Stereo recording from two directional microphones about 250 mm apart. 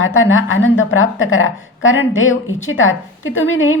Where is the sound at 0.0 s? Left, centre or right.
Left.